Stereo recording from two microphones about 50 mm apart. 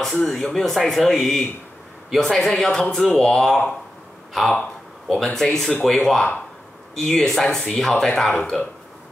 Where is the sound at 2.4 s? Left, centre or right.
Centre.